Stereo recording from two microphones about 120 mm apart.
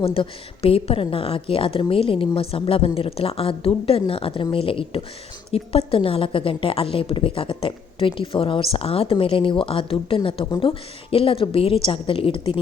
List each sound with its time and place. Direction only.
0.0 s a woman's voice: 55° left (ahead or behind)